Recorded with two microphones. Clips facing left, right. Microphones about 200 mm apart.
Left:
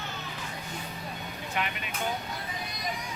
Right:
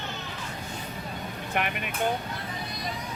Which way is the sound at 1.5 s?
55° right (ahead or behind).